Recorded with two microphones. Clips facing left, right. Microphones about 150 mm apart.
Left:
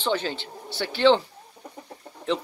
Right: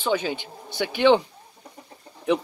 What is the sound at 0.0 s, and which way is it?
Speech, 10° right (ahead or behind).